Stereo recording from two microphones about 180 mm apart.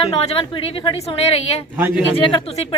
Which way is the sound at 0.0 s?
35° left (ahead or behind).